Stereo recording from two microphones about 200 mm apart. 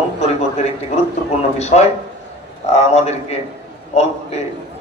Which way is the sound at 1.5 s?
35° left (ahead or behind).